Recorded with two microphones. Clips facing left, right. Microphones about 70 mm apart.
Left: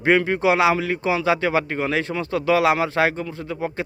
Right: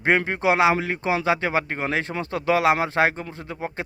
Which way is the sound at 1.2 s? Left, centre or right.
Right.